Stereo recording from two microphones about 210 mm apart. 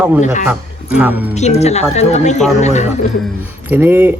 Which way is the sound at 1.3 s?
30° left (ahead or behind).